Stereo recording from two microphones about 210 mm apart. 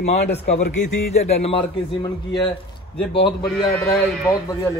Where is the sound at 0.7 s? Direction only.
35° left (ahead or behind).